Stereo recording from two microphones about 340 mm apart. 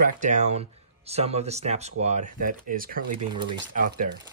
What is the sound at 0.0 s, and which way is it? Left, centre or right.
Speech, right.